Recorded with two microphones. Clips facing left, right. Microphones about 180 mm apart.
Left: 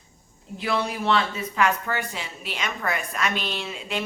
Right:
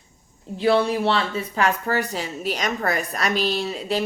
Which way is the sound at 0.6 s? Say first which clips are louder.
Right 8 dB; 30° right (ahead or behind).